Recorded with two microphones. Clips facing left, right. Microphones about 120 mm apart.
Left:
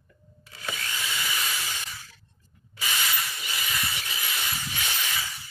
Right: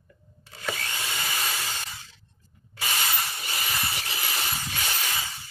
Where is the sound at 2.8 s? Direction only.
40° right (ahead or behind).